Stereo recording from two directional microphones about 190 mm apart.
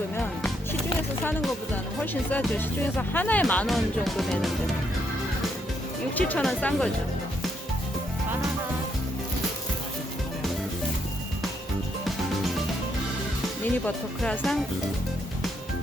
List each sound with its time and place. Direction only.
0.2 s music: 5° left (ahead or behind)
2.3 s speech: 10° left (ahead or behind)
6.1 s speech: 10° left (ahead or behind)
13.8 s speech: 5° left (ahead or behind)